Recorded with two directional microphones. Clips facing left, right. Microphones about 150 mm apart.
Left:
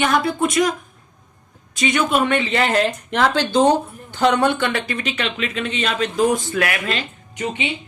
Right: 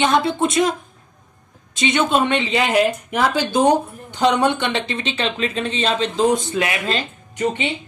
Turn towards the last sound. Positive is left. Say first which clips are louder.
# right 3 dB
turn(degrees=-45)  # may be behind; listen again after turning